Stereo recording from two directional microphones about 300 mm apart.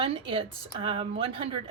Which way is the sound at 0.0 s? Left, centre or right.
Centre.